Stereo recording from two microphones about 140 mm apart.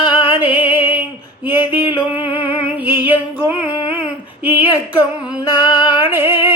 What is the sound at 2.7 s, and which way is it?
Music, 10° right (ahead or behind).